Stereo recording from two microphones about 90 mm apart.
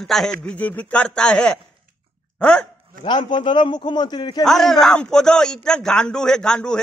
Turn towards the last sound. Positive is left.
turn(degrees=10)  # may be behind; listen again after turning